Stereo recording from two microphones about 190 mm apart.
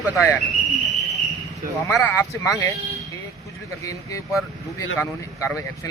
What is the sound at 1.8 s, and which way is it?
Speech, 15° left (ahead or behind).